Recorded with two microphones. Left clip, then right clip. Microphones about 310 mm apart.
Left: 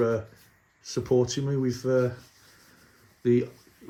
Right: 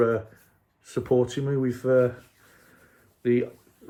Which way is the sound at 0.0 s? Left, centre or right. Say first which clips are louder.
Right 3 dB; centre.